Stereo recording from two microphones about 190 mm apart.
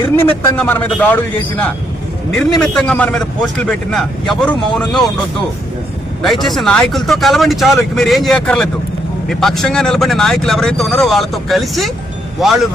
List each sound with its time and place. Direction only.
0.0 s a man's voice: 15° left (ahead or behind)
6.2 s a man's voice: centre (ahead or behind)